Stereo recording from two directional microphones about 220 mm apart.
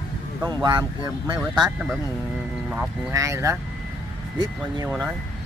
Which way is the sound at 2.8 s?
10° right (ahead or behind).